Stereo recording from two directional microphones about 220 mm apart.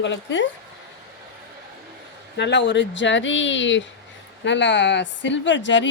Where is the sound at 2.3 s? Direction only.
50° left (ahead or behind).